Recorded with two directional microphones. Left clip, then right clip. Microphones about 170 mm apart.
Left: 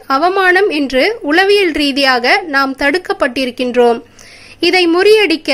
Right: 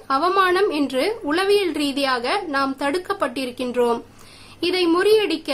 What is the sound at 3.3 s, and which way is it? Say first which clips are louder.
Speech: left 10 dB; 15° left (ahead or behind).